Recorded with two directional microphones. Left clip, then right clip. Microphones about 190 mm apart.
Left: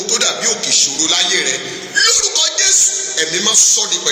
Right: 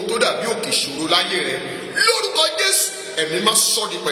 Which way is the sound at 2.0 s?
15° right (ahead or behind).